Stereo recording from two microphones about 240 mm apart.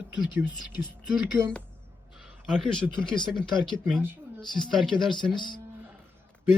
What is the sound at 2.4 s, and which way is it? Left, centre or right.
Speech, centre.